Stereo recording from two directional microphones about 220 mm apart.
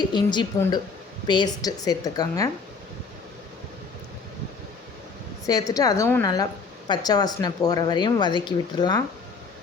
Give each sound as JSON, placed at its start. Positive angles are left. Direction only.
{"t": 0.1, "sound": "a woman's voice", "side_deg": 20}
{"t": 5.5, "sound": "a woman's voice", "side_deg": 15}